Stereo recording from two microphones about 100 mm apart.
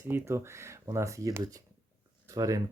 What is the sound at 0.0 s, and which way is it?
Speech, 25° right (ahead or behind).